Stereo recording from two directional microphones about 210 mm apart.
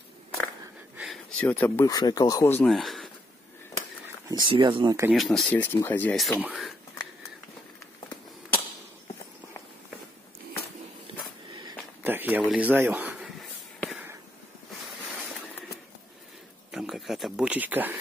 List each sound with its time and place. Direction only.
0.9 s speech: centre (ahead or behind)
4.3 s speech: 20° right (ahead or behind)
5.1 s speech: centre (ahead or behind)
11.1 s a sound: 25° right (ahead or behind)
12.0 s a man's voice: 10° right (ahead or behind)
13.7 s a sound: centre (ahead or behind)
16.7 s speech: centre (ahead or behind)